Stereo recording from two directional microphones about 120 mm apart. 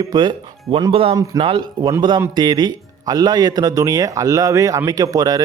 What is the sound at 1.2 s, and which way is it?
Speech, 40° right (ahead or behind).